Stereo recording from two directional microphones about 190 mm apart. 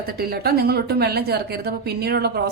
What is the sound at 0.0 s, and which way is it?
A woman's voice, 55° right (ahead or behind).